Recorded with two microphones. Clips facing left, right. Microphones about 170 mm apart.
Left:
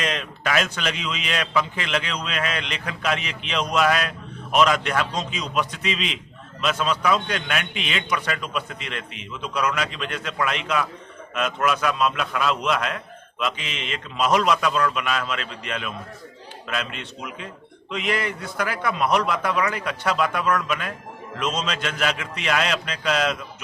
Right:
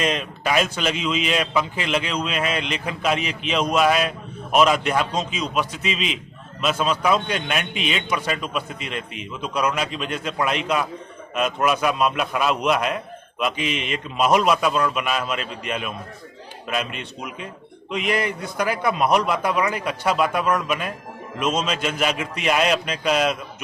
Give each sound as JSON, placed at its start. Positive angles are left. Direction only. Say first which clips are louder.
{"t": 0.0, "sound": "a man's voice", "louder": "right 3 dB", "side_deg": -10}
{"t": 10.2, "sound": "a man's voice", "louder": "right 2 dB", "side_deg": -30}
{"t": 10.5, "sound": "a man's voice", "louder": "right 2 dB", "side_deg": -15}